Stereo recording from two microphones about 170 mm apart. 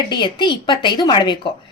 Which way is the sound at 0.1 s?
25° left (ahead or behind).